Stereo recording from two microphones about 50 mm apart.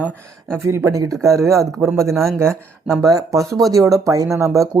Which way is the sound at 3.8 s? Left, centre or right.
Right.